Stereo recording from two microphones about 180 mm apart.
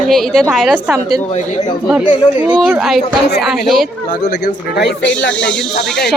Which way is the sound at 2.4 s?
5° right (ahead or behind).